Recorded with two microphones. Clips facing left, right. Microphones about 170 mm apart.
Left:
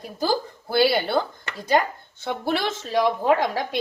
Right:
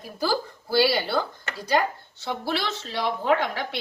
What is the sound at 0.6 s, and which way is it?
Speech, 55° left (ahead or behind).